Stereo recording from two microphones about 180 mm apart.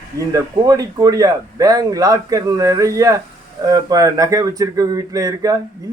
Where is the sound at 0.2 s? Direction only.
20° right (ahead or behind).